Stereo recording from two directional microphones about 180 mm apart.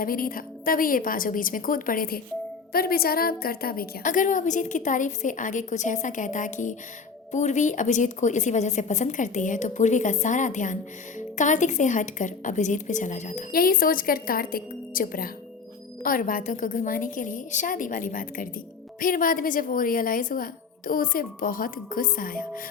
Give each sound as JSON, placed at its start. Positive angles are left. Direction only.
{"t": 0.0, "sound": "a woman's voice", "side_deg": 50}